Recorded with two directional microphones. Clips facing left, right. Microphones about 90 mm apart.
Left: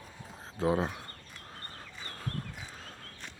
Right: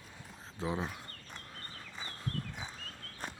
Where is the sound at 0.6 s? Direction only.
40° left (ahead or behind).